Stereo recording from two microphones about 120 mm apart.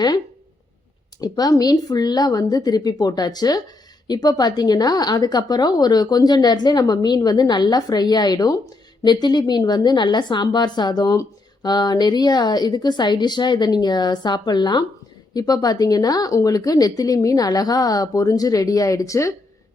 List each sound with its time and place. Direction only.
1.2 s a woman's voice: 35° left (ahead or behind)